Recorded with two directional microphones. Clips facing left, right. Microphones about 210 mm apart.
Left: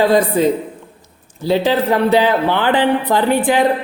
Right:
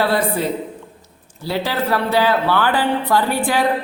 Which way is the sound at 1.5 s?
20° left (ahead or behind).